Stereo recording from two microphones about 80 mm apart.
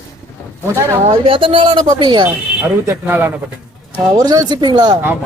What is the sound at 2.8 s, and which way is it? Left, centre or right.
Speech, right.